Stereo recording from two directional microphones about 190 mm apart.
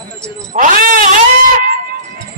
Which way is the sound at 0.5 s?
45° right (ahead or behind).